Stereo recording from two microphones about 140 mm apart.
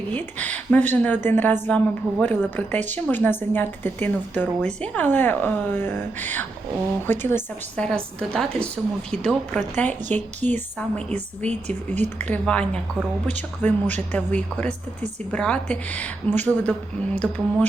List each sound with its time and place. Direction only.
0.1 s a woman's voice: 10° left (ahead or behind)
7.9 s a woman's voice: 5° left (ahead or behind)